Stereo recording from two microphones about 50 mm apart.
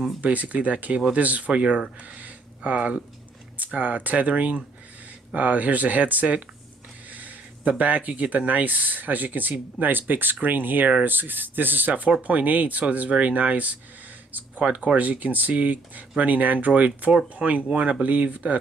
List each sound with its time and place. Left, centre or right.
0.2 s speech: right